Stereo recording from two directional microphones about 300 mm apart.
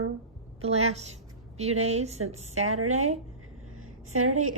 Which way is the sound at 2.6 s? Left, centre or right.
Right.